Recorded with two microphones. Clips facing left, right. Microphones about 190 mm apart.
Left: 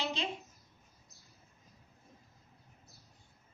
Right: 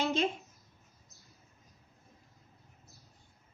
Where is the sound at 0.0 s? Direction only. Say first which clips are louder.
Right 7 dB; 50° right (ahead or behind).